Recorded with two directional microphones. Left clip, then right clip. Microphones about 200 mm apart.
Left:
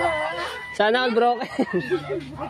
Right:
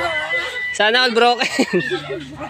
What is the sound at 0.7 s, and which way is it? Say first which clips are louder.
Speech: right 5 dB; 15° left (ahead or behind).